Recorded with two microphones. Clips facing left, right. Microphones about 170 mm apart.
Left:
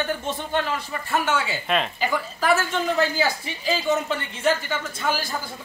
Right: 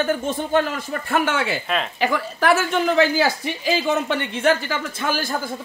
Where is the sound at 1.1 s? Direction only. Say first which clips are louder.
Right 2 dB; 60° right (ahead or behind).